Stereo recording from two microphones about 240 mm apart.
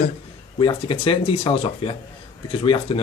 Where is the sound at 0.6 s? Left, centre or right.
Left.